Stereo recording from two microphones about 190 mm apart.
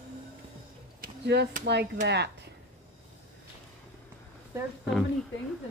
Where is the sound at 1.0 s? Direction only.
60° right (ahead or behind).